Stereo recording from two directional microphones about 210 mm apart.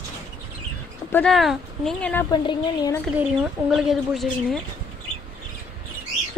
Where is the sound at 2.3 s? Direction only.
20° left (ahead or behind).